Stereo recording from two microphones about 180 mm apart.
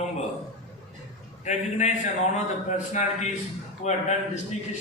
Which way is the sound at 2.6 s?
40° left (ahead or behind).